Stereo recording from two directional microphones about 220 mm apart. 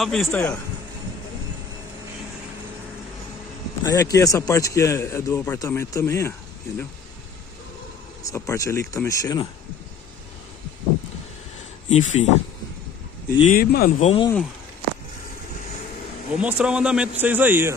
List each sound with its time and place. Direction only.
0.0 s a man's voice: centre (ahead or behind)
3.8 s a man's voice: 15° left (ahead or behind)
8.3 s a man's voice: 15° left (ahead or behind)
11.9 s speech: 35° left (ahead or behind)
13.4 s speech: 40° left (ahead or behind)
16.3 s a man's voice: 5° right (ahead or behind)